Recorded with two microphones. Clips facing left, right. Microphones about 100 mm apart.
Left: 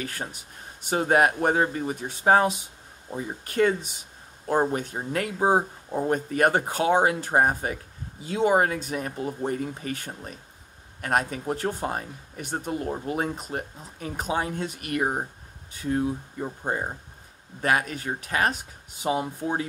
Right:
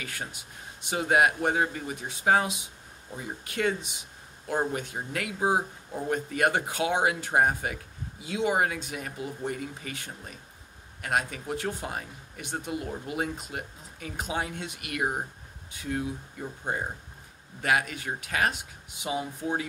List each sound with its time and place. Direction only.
0.0 s speech: 40° left (ahead or behind)